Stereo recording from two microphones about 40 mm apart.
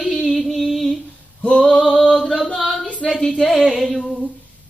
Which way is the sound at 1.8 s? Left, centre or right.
Centre.